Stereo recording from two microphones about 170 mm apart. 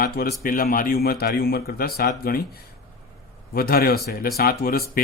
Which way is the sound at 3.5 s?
60° left (ahead or behind).